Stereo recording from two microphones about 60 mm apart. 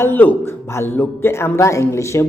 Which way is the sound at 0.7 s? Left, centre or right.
Left.